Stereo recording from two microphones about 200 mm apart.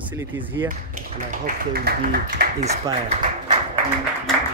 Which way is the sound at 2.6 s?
30° right (ahead or behind).